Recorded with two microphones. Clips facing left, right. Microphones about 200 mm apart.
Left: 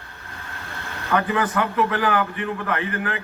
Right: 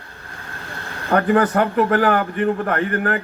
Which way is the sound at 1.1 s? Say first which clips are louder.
Right 6 dB; 45° right (ahead or behind).